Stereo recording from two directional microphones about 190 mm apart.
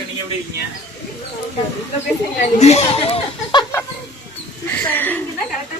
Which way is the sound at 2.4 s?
35° left (ahead or behind).